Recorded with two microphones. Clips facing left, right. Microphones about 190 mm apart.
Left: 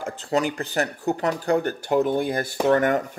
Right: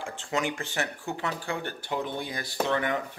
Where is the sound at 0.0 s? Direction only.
40° left (ahead or behind).